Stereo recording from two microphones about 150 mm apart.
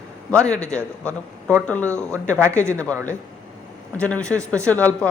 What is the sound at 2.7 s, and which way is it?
Speech, 10° left (ahead or behind).